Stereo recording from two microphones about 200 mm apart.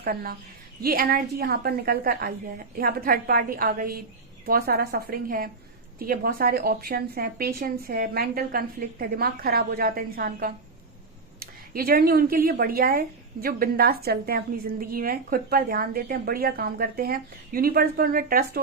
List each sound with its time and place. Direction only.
0.0 s speech: 50° right (ahead or behind)